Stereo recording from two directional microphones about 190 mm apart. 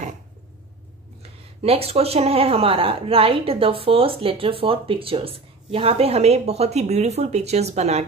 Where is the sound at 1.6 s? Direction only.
30° right (ahead or behind).